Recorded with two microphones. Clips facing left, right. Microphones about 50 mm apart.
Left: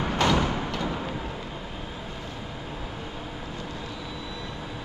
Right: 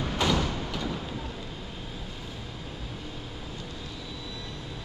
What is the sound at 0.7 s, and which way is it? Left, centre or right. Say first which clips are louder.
Vehicle: left 3 dB; left.